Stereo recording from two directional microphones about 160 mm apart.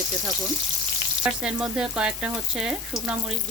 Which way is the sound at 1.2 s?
5° right (ahead or behind).